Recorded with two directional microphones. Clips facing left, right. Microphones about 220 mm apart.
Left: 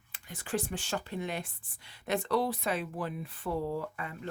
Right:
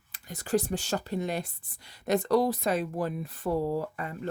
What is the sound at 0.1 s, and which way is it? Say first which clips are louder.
Speech: right 7 dB; 40° right (ahead or behind).